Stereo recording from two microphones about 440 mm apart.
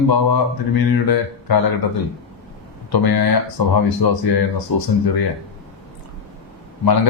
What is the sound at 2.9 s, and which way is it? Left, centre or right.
Mantra, left.